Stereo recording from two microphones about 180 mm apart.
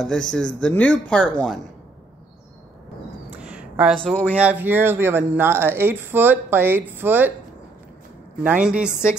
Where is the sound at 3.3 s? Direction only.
5° right (ahead or behind).